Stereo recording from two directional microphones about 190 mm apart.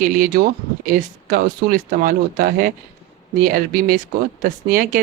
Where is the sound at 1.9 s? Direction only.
45° right (ahead or behind).